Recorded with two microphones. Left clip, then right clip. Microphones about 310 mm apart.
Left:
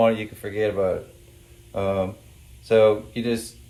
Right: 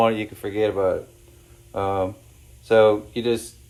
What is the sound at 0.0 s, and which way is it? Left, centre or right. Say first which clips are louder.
Speech: even; centre.